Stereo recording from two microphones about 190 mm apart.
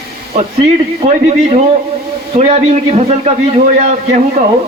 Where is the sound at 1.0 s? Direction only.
35° right (ahead or behind).